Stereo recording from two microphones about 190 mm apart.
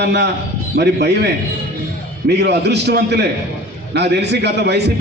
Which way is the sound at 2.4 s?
60° right (ahead or behind).